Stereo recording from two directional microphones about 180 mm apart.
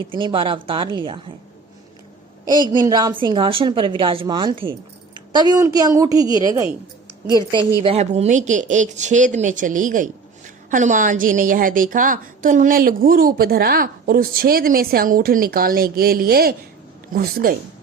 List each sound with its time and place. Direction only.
0.0 s a woman's voice: 25° right (ahead or behind)
2.8 s a woman's voice: 20° right (ahead or behind)
7.8 s a woman's voice: 35° right (ahead or behind); by 17.5 s 55° right (ahead or behind)